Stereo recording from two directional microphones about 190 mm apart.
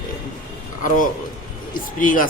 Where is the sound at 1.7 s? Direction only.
45° left (ahead or behind).